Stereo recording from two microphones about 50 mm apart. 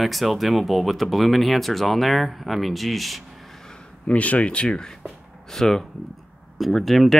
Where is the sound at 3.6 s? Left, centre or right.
Centre.